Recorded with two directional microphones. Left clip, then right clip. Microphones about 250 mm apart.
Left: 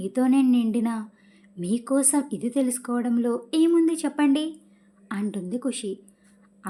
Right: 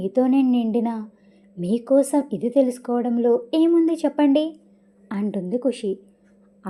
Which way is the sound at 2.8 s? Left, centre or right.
Left.